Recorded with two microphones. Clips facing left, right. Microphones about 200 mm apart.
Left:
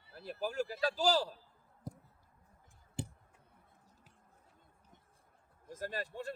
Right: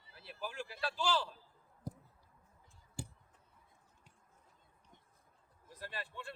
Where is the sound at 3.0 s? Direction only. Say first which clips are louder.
Left 5 dB; 20° left (ahead or behind).